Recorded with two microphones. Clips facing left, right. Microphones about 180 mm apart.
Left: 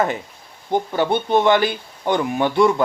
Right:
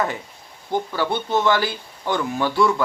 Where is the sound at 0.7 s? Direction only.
25° left (ahead or behind).